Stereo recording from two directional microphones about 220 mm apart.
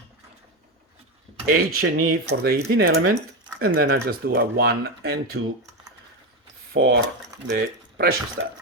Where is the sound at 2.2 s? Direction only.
45° right (ahead or behind).